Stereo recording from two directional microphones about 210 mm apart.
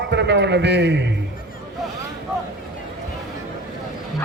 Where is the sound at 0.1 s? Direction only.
55° right (ahead or behind).